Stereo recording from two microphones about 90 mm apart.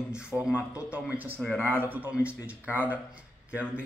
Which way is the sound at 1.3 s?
15° left (ahead or behind).